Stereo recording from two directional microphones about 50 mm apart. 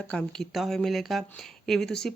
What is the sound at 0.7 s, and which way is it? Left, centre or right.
Speech, centre.